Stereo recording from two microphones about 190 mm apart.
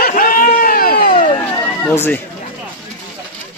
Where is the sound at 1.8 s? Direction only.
10° left (ahead or behind).